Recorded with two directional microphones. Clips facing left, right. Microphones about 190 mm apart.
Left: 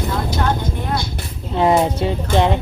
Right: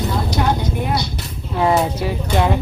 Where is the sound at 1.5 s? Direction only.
25° left (ahead or behind).